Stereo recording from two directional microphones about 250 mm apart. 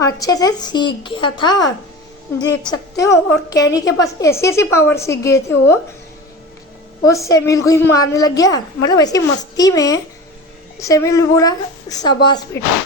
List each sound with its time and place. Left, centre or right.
0.0 s a woman's voice: centre
7.0 s a woman's voice: centre